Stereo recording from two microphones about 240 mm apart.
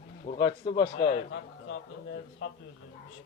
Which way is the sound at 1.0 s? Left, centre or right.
Left.